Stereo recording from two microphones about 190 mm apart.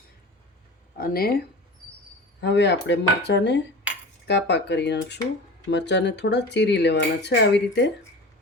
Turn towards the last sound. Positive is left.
turn(degrees=65)  # may be behind; listen again after turning